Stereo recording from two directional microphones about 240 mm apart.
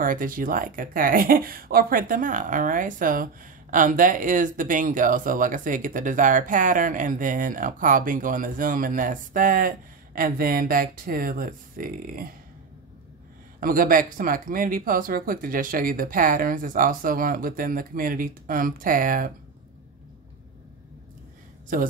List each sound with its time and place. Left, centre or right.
0.0 s speech: right
13.6 s speech: right